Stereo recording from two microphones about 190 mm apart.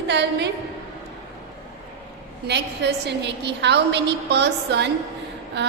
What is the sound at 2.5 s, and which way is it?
A woman's voice, 65° right (ahead or behind).